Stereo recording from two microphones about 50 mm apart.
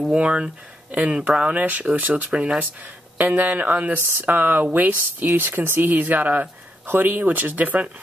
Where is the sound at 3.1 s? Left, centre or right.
Right.